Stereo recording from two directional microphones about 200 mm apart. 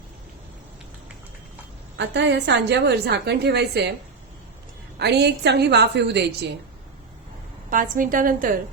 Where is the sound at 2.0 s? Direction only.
65° right (ahead or behind).